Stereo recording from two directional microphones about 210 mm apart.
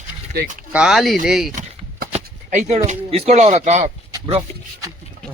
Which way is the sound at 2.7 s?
30° right (ahead or behind).